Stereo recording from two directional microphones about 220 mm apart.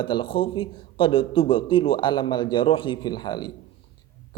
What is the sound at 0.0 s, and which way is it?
A man's voice, 20° left (ahead or behind).